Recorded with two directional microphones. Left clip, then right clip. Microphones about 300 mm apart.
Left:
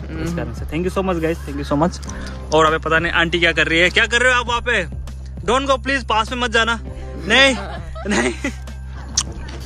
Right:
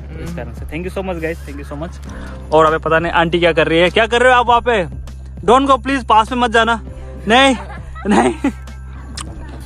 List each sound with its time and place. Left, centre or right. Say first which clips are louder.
0.2 s speech: left 3 dB; centre
9.2 s music: left 9 dB; centre